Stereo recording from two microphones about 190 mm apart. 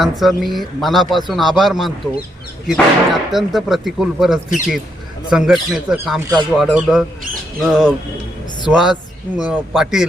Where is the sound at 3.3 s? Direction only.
Centre (ahead or behind).